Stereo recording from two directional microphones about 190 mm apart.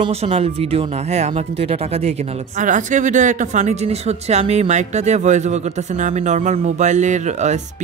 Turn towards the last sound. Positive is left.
turn(degrees=-40)  # may be behind; listen again after turning